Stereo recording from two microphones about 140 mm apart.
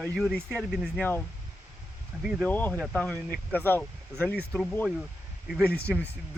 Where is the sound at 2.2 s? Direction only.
5° right (ahead or behind).